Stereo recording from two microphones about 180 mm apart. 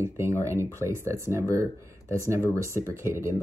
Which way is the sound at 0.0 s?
15° right (ahead or behind).